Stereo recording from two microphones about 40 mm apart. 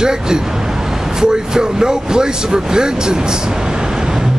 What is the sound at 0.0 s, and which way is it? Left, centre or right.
Speech, centre.